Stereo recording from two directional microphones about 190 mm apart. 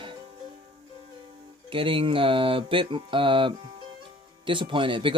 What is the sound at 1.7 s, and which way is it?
Speech, 30° right (ahead or behind).